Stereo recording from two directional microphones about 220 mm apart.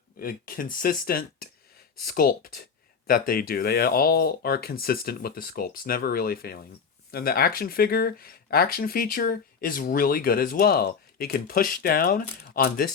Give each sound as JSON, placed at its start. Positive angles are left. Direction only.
{"t": 0.2, "sound": "speech", "side_deg": 40}